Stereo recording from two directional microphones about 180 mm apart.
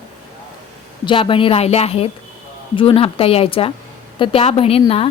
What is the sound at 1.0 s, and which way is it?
A woman's voice, 30° left (ahead or behind).